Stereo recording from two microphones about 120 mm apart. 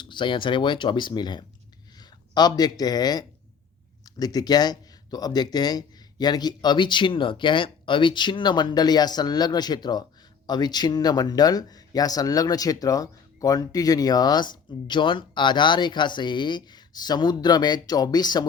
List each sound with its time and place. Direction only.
0.0 s speech: 40° left (ahead or behind)